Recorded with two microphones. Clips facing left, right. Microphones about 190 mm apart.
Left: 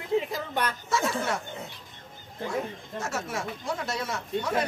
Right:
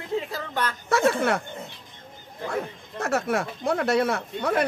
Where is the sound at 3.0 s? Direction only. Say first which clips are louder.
Right 8 dB; 60° right (ahead or behind).